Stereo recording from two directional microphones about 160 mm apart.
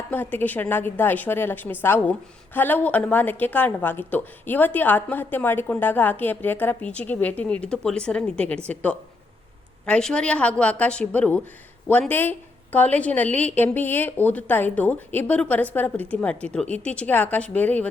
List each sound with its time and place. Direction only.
0.1 s a woman's voice: 10° left (ahead or behind)